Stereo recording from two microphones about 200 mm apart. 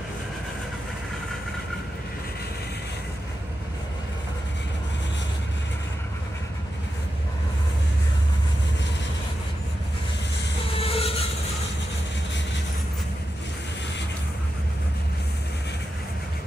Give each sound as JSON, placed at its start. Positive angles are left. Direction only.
{"t": 10.7, "sound": "train", "side_deg": 30}